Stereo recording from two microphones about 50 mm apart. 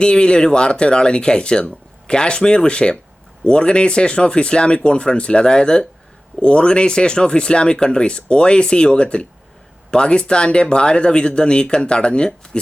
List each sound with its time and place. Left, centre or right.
0.0 s speech: centre